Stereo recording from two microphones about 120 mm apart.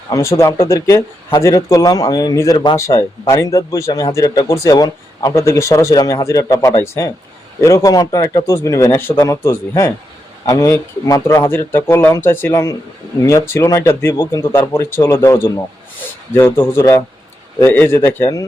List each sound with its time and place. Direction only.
0.1 s speech: 25° left (ahead or behind)